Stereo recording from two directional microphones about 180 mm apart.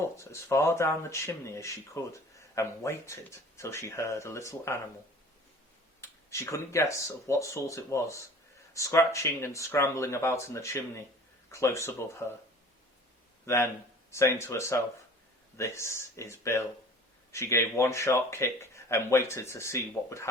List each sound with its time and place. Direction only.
0.0 s speech: 15° left (ahead or behind)
6.0 s speech: 15° left (ahead or behind)
13.4 s speech: 15° left (ahead or behind)